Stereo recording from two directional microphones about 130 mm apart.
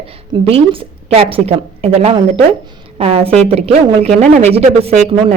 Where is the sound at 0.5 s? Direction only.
45° right (ahead or behind).